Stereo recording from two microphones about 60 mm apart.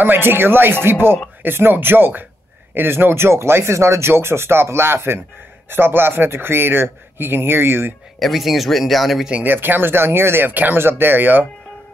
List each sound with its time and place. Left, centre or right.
0.0 s speech: right
8.2 s speech: centre
9.3 s speech: right